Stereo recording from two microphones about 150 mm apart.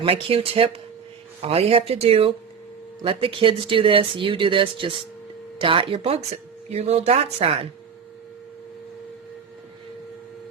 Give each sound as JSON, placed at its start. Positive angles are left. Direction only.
{"t": 0.0, "sound": "speech", "side_deg": -40}